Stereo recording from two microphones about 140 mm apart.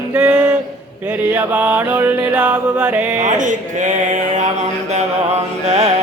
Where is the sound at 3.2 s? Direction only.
65° right (ahead or behind).